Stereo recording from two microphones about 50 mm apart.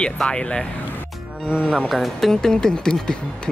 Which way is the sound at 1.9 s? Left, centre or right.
Centre.